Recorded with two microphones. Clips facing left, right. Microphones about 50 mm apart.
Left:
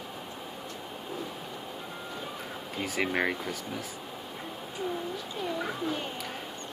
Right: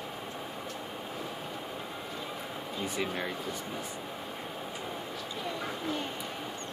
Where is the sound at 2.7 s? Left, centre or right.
Left.